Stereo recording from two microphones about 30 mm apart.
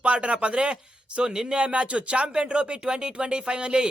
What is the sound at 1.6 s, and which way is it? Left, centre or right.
Speech, right.